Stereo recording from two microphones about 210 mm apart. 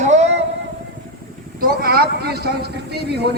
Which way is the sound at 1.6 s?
45° right (ahead or behind).